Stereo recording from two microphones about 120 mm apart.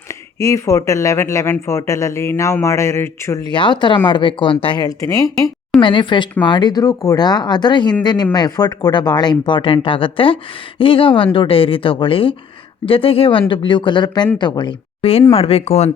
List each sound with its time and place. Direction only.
0.3 s speech: 25° left (ahead or behind)
3.5 s speech: 40° left (ahead or behind)
5.8 s a woman's voice: 45° left (ahead or behind)
15.3 s speech: 55° left (ahead or behind)